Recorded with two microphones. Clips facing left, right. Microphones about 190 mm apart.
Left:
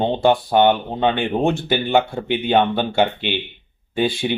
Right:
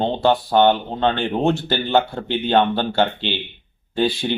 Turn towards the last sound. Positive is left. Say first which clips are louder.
# even
turn(degrees=10)  # may be behind; listen again after turning